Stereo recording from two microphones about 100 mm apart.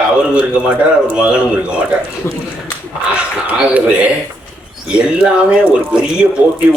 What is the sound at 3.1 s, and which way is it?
Speech, 15° right (ahead or behind).